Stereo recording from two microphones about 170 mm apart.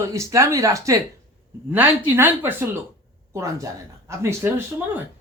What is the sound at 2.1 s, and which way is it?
Speech, 10° right (ahead or behind).